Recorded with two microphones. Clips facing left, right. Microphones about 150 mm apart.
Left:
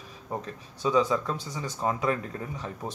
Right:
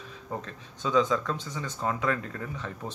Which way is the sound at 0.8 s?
10° left (ahead or behind).